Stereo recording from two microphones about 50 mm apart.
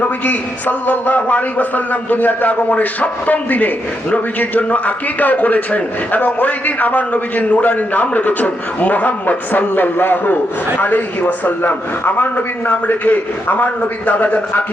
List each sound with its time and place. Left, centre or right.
0.0 s a man's voice: left